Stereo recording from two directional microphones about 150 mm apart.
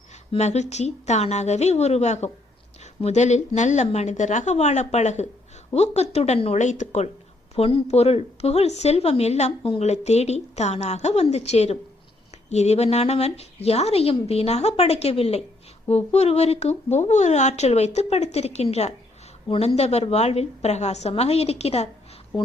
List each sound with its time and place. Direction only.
0.3 s a woman's voice: 50° left (ahead or behind)
7.5 s a woman's voice: 40° left (ahead or behind)